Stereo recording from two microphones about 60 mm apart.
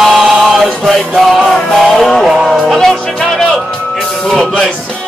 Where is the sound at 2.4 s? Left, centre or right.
Centre.